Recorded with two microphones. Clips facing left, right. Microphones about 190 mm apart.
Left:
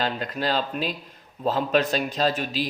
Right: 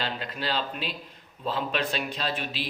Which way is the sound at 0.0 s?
45° left (ahead or behind).